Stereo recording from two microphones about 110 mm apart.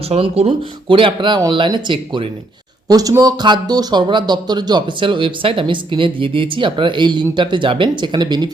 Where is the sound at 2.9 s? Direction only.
35° right (ahead or behind).